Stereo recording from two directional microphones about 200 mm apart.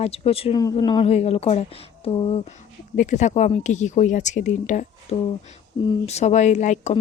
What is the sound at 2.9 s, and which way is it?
Speech, 40° left (ahead or behind).